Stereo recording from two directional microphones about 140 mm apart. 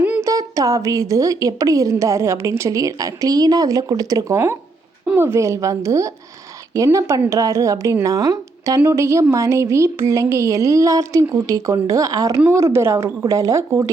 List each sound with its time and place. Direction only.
0.2 s speech: 25° right (ahead or behind)